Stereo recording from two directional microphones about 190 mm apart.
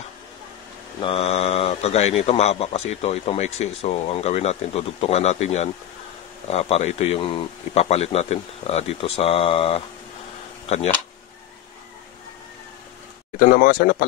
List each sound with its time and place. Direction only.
1.0 s speech: 35° left (ahead or behind)
13.4 s speech: 45° left (ahead or behind)